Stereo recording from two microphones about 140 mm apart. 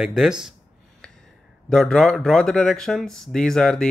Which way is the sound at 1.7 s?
5° left (ahead or behind).